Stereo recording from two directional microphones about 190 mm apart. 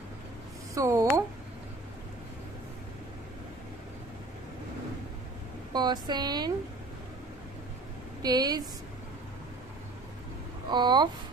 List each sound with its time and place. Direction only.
0.7 s speech: 15° right (ahead or behind)
5.7 s speech: 20° right (ahead or behind)
8.2 s speech: 20° right (ahead or behind)
10.7 s speech: 25° right (ahead or behind)